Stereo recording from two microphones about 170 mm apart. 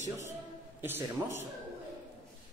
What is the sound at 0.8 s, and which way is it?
Speech, 10° right (ahead or behind).